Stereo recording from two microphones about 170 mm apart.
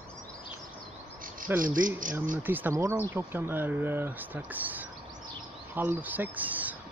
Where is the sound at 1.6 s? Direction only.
55° right (ahead or behind).